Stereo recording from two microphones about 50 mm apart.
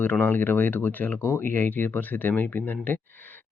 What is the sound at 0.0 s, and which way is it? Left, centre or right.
Speech, left.